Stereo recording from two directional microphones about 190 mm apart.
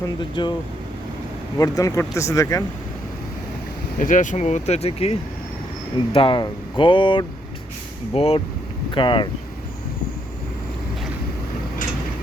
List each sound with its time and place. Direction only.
0.0 s speech: 25° left (ahead or behind)
1.5 s speech: 20° left (ahead or behind)
3.9 s speech: 45° left (ahead or behind)
6.1 s speech: 25° left (ahead or behind)